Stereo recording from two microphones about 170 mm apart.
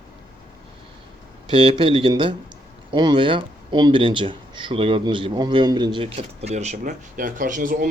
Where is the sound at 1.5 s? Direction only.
30° right (ahead or behind).